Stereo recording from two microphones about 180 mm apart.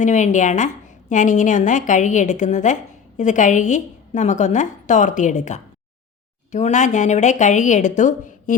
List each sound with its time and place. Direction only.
0.0 s a woman's voice: 45° left (ahead or behind)